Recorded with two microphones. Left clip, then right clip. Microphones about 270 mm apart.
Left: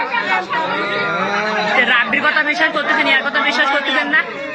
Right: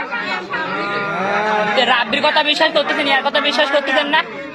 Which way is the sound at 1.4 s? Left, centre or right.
Right.